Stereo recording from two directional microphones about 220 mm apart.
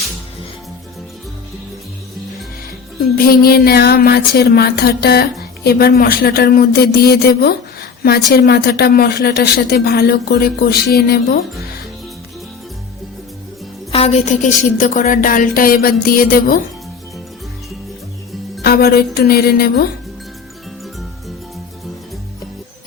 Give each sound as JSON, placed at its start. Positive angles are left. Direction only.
{"t": 3.0, "sound": "speech", "side_deg": 45}
{"t": 13.9, "sound": "a woman's voice", "side_deg": 30}
{"t": 14.8, "sound": "music", "side_deg": 35}
{"t": 18.6, "sound": "speech", "side_deg": 45}